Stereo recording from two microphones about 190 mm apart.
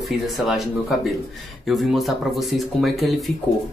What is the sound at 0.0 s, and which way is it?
Speech, centre (ahead or behind).